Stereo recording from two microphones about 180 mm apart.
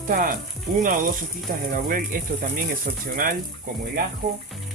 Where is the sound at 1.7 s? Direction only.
50° right (ahead or behind).